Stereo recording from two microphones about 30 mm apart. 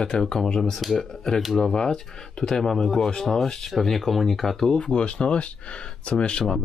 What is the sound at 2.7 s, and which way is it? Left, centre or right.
Speech, centre.